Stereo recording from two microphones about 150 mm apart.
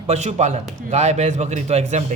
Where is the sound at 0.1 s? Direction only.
50° right (ahead or behind).